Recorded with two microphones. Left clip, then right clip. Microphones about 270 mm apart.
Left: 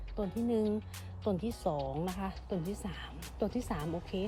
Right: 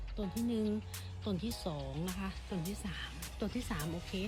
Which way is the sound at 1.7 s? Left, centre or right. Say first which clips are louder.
Left 6 dB; centre.